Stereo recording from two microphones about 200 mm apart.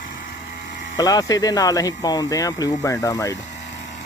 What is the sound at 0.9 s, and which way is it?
Speech, 20° left (ahead or behind).